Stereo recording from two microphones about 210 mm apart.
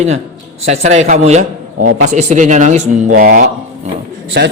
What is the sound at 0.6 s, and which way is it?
A man's voice, 30° right (ahead or behind).